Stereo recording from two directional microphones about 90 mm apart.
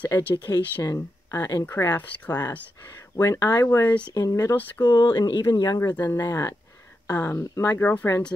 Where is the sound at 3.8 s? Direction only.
20° left (ahead or behind).